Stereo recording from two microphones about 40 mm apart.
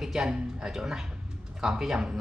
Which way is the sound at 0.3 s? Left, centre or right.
Centre.